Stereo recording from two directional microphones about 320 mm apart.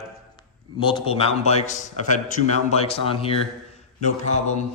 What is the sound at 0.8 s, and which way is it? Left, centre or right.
A man's voice, centre.